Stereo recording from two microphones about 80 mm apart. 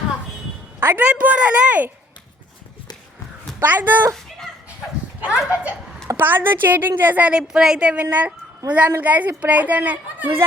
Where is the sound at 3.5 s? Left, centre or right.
Right.